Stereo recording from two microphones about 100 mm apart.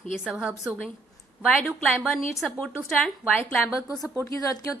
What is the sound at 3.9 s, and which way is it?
Speech, 35° left (ahead or behind).